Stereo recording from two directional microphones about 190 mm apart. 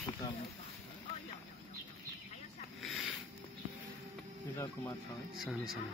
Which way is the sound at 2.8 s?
Centre (ahead or behind).